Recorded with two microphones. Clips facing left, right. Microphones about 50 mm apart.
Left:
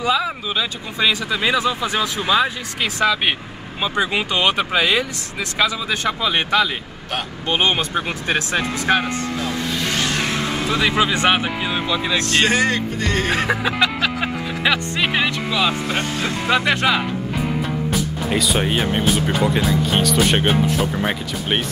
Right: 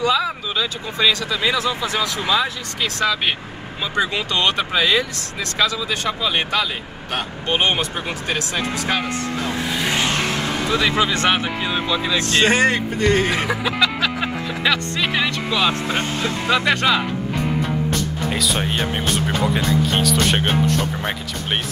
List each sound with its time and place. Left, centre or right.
0.0 s speech: centre
5.9 s speech: left
9.4 s music: centre
10.5 s speech: centre
12.4 s speech: right
13.0 s speech: centre
13.5 s speech: left
13.8 s music: centre
16.4 s speech: centre